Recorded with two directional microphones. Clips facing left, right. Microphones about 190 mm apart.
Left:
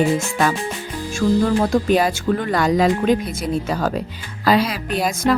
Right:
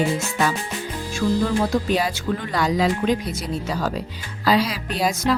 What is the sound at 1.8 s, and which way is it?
Speech, 55° left (ahead or behind).